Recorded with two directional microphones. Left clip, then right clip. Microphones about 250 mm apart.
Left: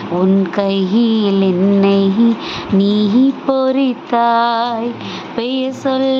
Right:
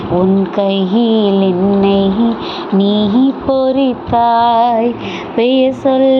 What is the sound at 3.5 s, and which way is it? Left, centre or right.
Speech, centre.